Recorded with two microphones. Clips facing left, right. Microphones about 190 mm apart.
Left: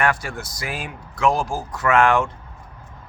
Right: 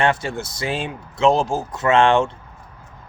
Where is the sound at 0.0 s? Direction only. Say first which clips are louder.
Right 3 dB; 25° right (ahead or behind).